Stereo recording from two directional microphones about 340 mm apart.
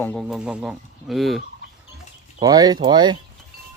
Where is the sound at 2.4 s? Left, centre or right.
Centre.